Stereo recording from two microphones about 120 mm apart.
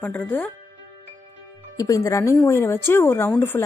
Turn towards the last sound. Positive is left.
turn(degrees=20)  # may be behind; listen again after turning